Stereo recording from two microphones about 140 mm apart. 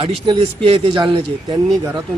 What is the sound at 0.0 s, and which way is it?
A man's voice, 40° right (ahead or behind).